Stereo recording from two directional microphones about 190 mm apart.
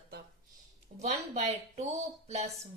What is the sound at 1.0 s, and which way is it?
A woman's voice, 35° right (ahead or behind).